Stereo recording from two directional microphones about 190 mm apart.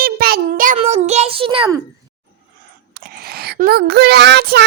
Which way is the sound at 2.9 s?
55° right (ahead or behind).